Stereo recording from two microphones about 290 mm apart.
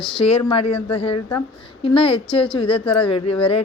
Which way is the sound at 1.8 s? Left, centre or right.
Centre.